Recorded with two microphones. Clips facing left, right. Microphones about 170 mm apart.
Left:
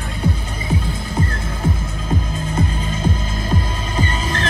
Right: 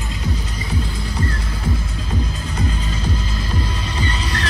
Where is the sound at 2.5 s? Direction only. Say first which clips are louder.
Left 2 dB; 50° left (ahead or behind).